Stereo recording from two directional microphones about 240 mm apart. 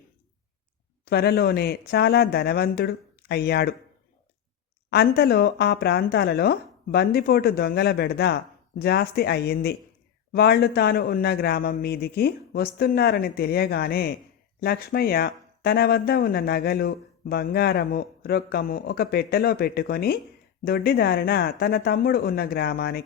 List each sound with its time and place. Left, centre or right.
1.0 s speech: left
4.9 s speech: left